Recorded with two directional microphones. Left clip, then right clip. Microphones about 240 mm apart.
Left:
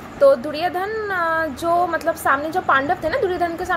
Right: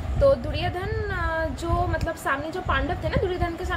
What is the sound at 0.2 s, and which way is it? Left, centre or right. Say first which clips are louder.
Speech: left 6 dB; centre.